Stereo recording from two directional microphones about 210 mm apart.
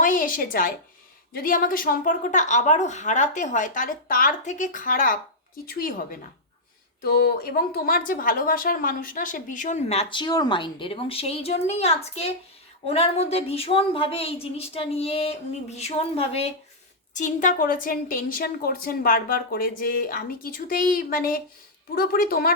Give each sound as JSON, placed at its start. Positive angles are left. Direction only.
{"t": 0.0, "sound": "a woman's voice", "side_deg": 40}